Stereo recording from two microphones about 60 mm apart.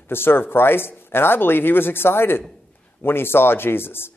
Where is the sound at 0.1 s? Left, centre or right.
Left.